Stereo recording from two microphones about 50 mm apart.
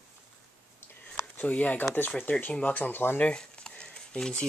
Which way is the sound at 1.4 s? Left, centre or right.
Left.